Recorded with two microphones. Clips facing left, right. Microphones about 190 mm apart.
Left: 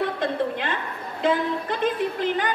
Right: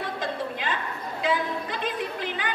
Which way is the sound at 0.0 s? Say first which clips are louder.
Left 6 dB; 60° left (ahead or behind).